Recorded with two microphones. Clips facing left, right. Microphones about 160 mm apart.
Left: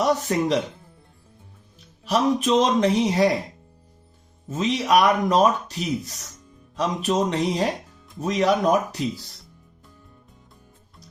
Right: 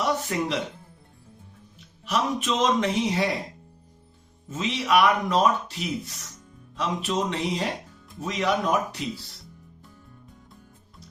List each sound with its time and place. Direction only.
0.3 s speech: 40° left (ahead or behind)
2.0 s speech: 35° left (ahead or behind)
4.4 s speech: 40° left (ahead or behind)